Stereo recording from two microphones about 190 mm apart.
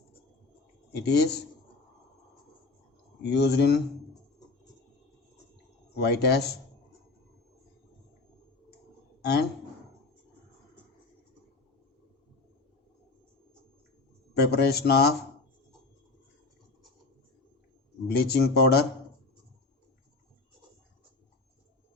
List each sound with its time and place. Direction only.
0.9 s speech: 60° left (ahead or behind)
3.2 s speech: 60° left (ahead or behind)
6.0 s speech: 60° left (ahead or behind)
14.3 s speech: 60° left (ahead or behind)
18.1 s speech: 60° left (ahead or behind)